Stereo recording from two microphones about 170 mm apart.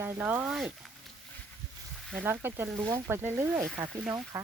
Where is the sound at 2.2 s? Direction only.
10° right (ahead or behind).